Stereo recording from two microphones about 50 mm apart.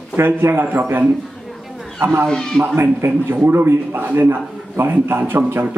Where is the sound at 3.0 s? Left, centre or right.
Right.